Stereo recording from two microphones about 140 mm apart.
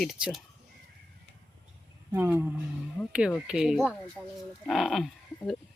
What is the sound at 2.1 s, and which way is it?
Speech, 15° right (ahead or behind).